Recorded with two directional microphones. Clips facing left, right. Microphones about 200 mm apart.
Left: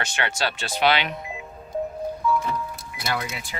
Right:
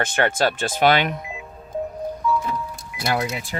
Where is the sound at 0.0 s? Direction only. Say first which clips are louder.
Right 7 dB; 50° right (ahead or behind).